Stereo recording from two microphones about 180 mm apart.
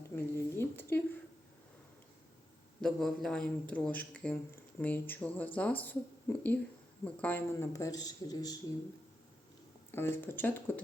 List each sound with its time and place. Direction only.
0.2 s a sound: 15° left (ahead or behind)
2.8 s a man's voice: centre (ahead or behind); by 8.5 s 20° left (ahead or behind)
9.9 s speech: 10° left (ahead or behind)